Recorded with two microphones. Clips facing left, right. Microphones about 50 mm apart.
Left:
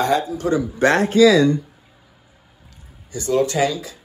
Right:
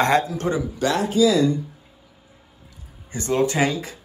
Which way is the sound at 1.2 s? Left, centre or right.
Left.